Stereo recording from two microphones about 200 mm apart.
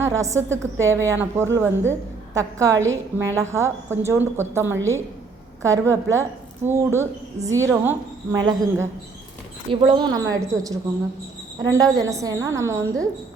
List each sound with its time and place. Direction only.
0.0 s a woman's voice: 15° right (ahead or behind)